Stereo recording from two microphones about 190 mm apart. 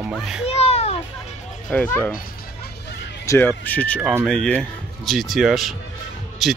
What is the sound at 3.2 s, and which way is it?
Speech, 10° left (ahead or behind).